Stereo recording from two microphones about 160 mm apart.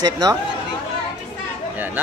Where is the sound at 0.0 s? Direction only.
25° right (ahead or behind).